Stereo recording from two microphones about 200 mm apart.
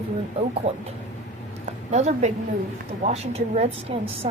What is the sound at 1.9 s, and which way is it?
Speech, 35° right (ahead or behind).